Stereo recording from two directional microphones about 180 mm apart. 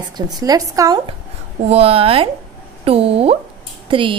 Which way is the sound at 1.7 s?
35° right (ahead or behind).